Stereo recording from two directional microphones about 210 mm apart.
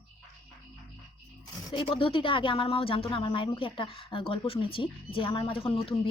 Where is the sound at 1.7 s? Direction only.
25° left (ahead or behind).